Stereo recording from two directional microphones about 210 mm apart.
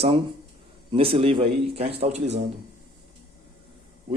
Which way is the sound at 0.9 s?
25° right (ahead or behind).